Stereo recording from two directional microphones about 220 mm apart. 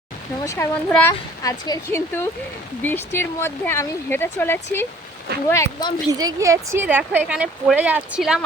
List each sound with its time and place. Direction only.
0.4 s speech: 10° left (ahead or behind)
6.1 s speech: 15° right (ahead or behind)